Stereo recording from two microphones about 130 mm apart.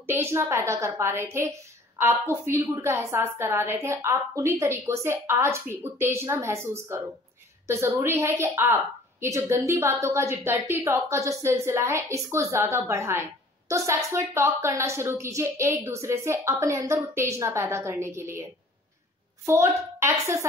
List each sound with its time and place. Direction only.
0.0 s a woman's voice: 20° right (ahead or behind)
19.4 s a child's voice: 20° right (ahead or behind)